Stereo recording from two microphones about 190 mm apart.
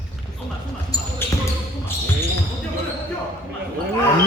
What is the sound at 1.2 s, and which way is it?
Basketball bounce, 10° left (ahead or behind).